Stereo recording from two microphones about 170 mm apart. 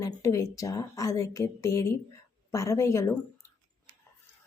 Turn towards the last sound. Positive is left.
turn(degrees=15)  # may be behind; listen again after turning